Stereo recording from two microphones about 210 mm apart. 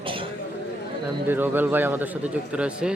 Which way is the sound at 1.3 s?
10° right (ahead or behind).